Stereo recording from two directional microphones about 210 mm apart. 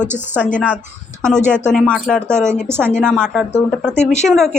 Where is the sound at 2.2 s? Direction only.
10° right (ahead or behind).